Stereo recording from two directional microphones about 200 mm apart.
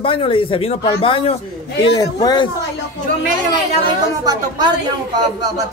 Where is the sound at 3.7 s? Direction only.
25° right (ahead or behind).